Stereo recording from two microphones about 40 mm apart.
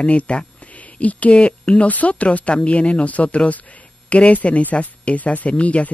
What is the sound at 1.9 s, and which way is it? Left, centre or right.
A man's voice, left.